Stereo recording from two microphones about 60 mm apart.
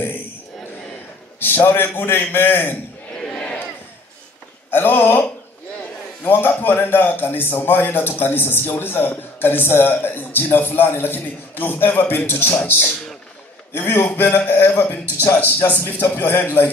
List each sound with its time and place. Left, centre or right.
1.4 s a man's voice: left
3.3 s battle cry: centre
4.6 s a man's voice: left